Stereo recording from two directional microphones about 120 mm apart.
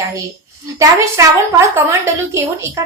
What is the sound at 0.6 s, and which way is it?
A woman's voice, 25° right (ahead or behind).